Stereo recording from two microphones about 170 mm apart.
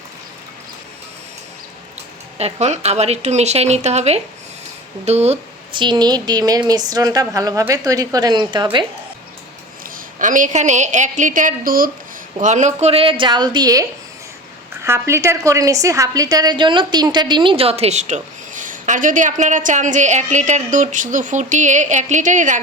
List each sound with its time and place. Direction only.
2.4 s speech: 40° right (ahead or behind)
9.8 s a woman's voice: 50° right (ahead or behind)
12.4 s a woman's voice: 45° right (ahead or behind)